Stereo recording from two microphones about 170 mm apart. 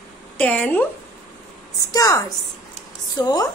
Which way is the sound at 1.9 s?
20° left (ahead or behind).